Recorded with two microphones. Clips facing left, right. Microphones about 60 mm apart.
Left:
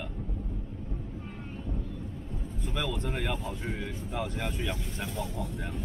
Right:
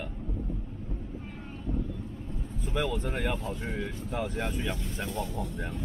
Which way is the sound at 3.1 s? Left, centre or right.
Centre.